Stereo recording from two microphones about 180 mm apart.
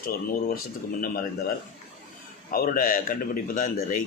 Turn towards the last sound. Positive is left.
turn(degrees=50)  # may be behind; listen again after turning